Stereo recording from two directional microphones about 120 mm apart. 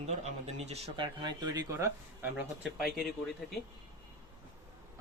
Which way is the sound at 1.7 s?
25° right (ahead or behind).